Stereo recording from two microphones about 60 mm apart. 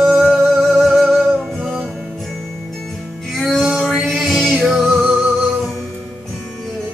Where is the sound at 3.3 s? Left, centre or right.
Centre.